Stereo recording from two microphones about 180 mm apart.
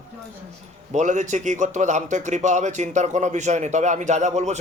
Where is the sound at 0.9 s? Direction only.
45° right (ahead or behind).